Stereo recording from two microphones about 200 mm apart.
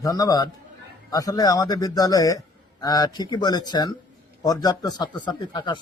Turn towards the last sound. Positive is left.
turn(degrees=20)  # may be behind; listen again after turning